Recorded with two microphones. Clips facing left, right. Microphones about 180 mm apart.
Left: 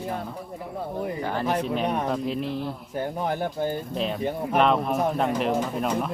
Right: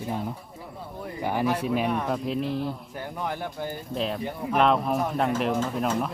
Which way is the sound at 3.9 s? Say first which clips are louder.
Right 1 dB; centre (ahead or behind).